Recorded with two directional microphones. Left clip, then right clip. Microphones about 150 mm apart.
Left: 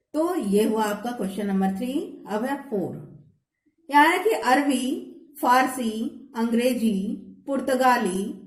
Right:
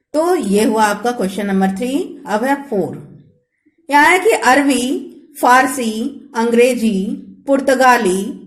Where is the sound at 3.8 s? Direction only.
35° right (ahead or behind).